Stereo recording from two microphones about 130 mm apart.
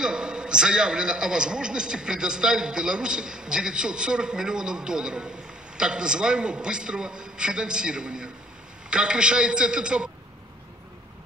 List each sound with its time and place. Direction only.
0.0 s a man's voice: 5° right (ahead or behind)